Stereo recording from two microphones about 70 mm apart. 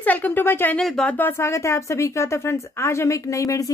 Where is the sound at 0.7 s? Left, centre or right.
Centre.